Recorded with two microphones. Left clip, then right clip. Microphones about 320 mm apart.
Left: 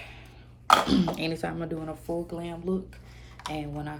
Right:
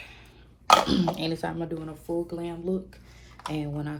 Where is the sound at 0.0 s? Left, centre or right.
Centre.